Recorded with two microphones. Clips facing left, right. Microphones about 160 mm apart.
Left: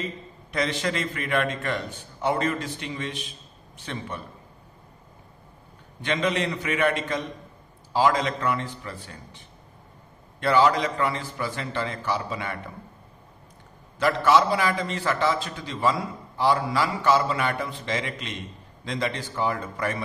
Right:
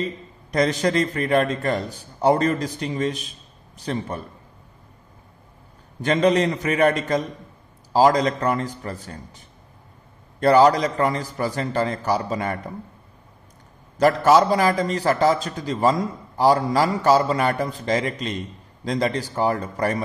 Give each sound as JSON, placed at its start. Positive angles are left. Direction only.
{"t": 0.0, "sound": "a man's voice", "side_deg": -40}
{"t": 5.9, "sound": "a man's voice", "side_deg": -40}
{"t": 10.4, "sound": "a man's voice", "side_deg": -40}
{"t": 13.9, "sound": "a man's voice", "side_deg": -40}